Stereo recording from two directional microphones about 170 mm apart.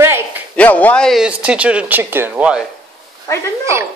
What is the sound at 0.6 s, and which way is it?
Speech, 10° left (ahead or behind).